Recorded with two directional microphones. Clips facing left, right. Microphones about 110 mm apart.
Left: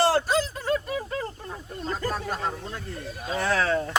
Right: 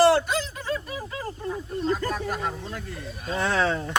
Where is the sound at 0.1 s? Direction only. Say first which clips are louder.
Right 1 dB; 35° left (ahead or behind).